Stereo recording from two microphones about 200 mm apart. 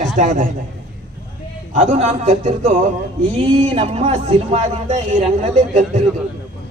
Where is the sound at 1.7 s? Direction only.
35° right (ahead or behind).